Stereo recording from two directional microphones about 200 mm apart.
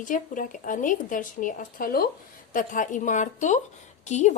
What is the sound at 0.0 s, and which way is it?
A woman's voice, 40° left (ahead or behind).